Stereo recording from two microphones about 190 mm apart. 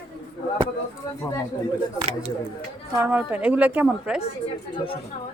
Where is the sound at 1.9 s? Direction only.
35° right (ahead or behind).